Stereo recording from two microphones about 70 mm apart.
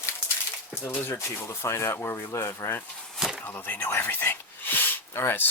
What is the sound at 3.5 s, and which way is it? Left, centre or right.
Speech, left.